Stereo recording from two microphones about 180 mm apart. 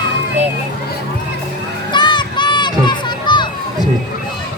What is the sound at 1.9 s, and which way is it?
Music, 25° left (ahead or behind).